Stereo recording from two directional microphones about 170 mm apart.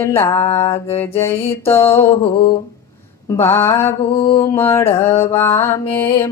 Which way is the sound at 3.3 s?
15° left (ahead or behind).